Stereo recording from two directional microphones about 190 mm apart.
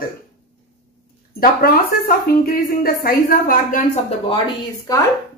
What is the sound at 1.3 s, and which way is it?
Speech, 50° left (ahead or behind).